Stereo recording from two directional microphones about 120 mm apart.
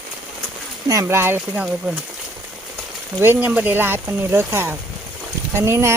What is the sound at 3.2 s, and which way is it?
Speech, 15° right (ahead or behind).